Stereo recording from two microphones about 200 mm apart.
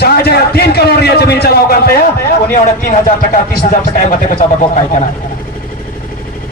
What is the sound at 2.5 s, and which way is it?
Speech, 40° left (ahead or behind).